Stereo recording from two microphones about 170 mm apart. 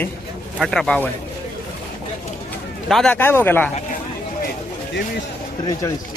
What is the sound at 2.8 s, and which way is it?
Speech, centre (ahead or behind).